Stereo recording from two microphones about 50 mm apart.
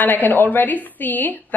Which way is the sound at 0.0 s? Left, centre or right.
Left.